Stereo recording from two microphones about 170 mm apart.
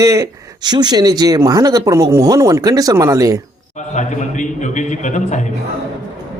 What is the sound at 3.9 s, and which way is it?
A man's voice, 45° left (ahead or behind).